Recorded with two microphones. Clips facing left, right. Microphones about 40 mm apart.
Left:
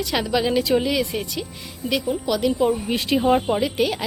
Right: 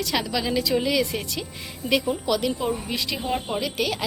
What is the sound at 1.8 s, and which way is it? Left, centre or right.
Speech, centre.